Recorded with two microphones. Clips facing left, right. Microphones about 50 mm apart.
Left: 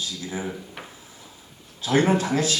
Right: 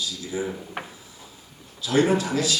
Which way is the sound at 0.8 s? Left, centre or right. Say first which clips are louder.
Right 5 dB; right.